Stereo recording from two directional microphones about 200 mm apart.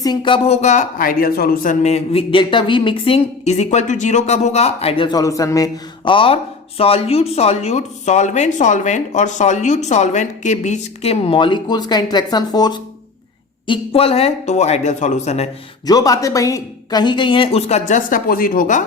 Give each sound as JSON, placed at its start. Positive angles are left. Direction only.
{"t": 0.0, "sound": "speech", "side_deg": 25}
{"t": 1.8, "sound": "speech", "side_deg": 30}
{"t": 15.9, "sound": "speech", "side_deg": 20}